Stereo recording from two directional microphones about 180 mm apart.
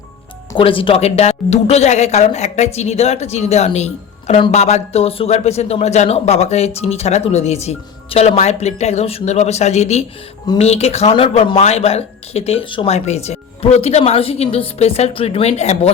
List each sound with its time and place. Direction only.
0.5 s speech: 30° left (ahead or behind)